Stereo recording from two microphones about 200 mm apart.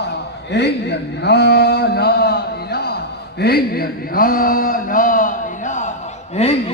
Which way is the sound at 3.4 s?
50° left (ahead or behind).